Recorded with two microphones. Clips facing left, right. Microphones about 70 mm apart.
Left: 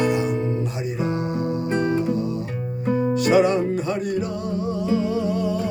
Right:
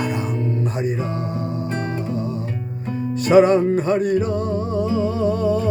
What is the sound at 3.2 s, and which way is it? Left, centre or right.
Music, right.